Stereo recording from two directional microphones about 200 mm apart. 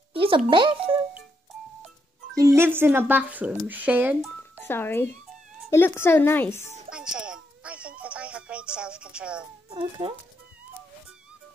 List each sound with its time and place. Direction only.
0.1 s a child's voice: 25° right (ahead or behind)
2.3 s speech: 15° right (ahead or behind)
4.4 s a sound: 10° left (ahead or behind)
5.7 s a woman's voice: 10° left (ahead or behind)
6.9 s music: 5° right (ahead or behind)
9.7 s speech: 25° right (ahead or behind)